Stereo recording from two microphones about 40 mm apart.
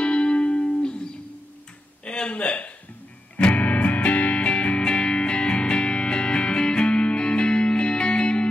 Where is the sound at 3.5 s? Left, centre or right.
Left.